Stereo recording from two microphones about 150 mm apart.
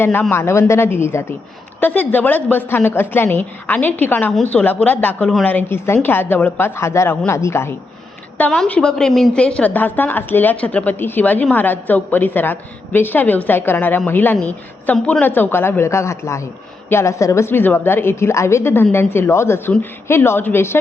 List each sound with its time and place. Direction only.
0.0 s a woman's voice: 15° left (ahead or behind)
8.4 s a woman's voice: 5° left (ahead or behind)